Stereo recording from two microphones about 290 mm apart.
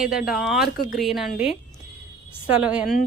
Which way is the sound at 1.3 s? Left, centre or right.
Left.